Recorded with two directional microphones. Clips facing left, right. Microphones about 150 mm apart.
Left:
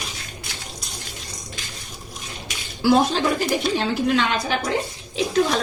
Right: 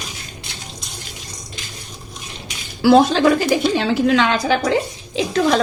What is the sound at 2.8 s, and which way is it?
A woman's voice, 85° right.